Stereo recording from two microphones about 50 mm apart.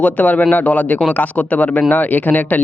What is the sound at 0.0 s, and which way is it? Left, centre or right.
Speech, left.